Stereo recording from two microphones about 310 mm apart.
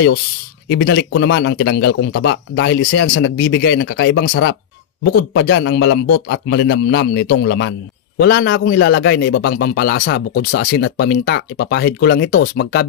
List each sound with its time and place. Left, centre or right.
0.7 s a man's voice: left